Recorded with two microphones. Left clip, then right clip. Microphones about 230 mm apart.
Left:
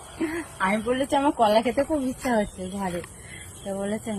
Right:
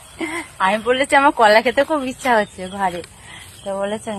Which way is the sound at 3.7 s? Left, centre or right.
Right.